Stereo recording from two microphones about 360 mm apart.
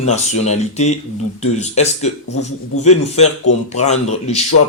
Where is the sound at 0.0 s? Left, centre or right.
Centre.